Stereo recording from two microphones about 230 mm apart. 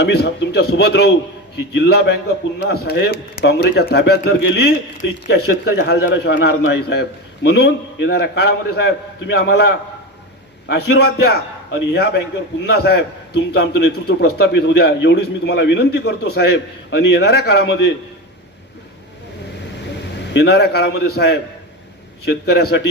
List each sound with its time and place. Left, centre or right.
0.0 s a man's voice: left
20.3 s a man's voice: left